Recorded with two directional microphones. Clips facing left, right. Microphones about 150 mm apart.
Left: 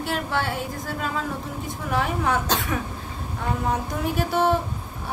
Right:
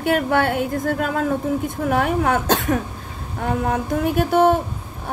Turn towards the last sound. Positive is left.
turn(degrees=-50)  # may be behind; listen again after turning